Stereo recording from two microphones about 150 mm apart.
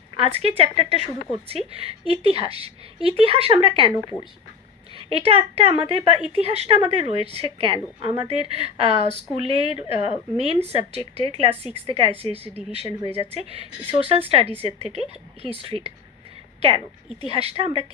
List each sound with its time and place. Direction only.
0.2 s speech: 40° right (ahead or behind)
4.9 s a woman's voice: 40° right (ahead or behind)